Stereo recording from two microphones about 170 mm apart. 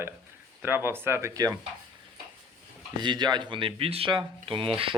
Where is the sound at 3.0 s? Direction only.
25° right (ahead or behind).